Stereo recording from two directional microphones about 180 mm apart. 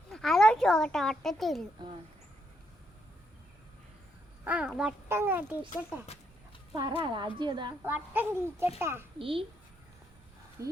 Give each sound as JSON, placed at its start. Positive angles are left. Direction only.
{"t": 0.1, "sound": "a child's voice", "side_deg": 0}
{"t": 4.4, "sound": "a child's voice", "side_deg": -5}
{"t": 6.7, "sound": "speech", "side_deg": -25}
{"t": 7.9, "sound": "a child's voice", "side_deg": -10}
{"t": 9.1, "sound": "speech", "side_deg": -30}
{"t": 10.6, "sound": "speech", "side_deg": -15}